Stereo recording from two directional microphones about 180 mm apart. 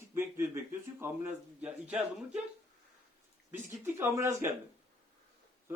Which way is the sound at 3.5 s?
15° right (ahead or behind).